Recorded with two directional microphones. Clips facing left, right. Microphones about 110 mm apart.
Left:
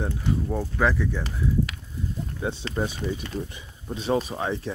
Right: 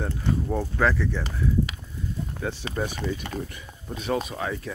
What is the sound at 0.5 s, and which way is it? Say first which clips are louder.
Speech: right 1 dB; 5° left (ahead or behind).